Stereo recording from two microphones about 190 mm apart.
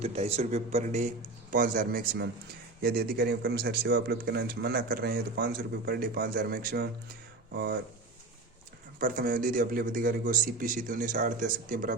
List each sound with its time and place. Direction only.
0.0 s a man's voice: 35° right (ahead or behind); by 7.8 s 55° right (ahead or behind)
9.0 s a man's voice: 50° right (ahead or behind)